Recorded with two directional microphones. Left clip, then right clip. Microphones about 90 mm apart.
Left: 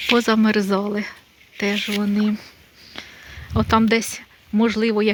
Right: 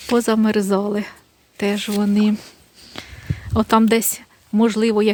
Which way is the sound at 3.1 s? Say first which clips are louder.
Right 3 dB; 90° right.